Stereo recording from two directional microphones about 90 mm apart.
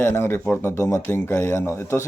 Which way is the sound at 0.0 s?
25° left (ahead or behind).